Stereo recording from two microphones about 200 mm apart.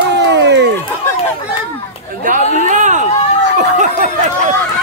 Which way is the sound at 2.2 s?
40° right (ahead or behind).